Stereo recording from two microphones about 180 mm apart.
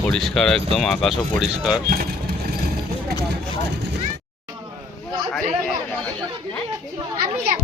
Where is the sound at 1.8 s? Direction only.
55° right (ahead or behind).